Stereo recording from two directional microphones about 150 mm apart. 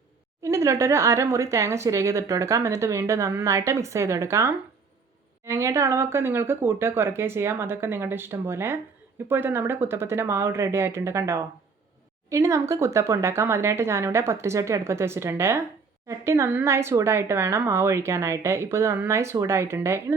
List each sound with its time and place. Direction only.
0.4 s speech: 20° right (ahead or behind)